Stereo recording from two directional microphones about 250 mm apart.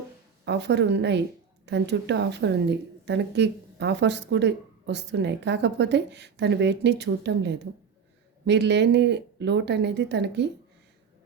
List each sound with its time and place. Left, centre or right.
0.4 s a woman's voice: right